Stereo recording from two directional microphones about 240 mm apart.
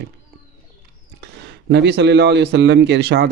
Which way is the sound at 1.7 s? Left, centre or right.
Right.